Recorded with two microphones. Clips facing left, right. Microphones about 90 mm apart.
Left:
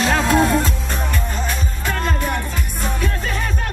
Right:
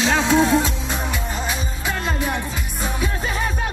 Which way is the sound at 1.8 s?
5° right (ahead or behind).